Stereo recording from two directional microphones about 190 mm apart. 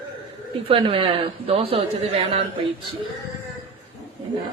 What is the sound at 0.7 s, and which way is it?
A woman's voice, 30° right (ahead or behind).